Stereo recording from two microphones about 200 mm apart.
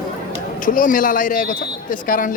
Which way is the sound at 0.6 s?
40° left (ahead or behind).